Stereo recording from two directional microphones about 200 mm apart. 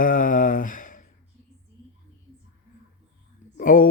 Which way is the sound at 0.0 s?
40° left (ahead or behind).